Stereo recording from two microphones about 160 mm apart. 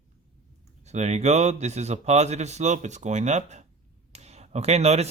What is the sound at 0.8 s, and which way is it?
Speech, 45° right (ahead or behind).